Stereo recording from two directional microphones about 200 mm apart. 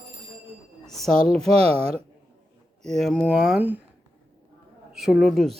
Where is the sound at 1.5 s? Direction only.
30° right (ahead or behind).